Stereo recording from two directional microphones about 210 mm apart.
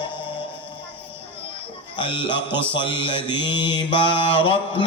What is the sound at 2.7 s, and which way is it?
Mantra, 25° left (ahead or behind).